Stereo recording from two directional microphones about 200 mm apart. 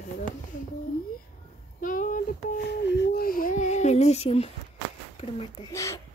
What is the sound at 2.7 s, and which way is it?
A woman's voice, 55° left (ahead or behind).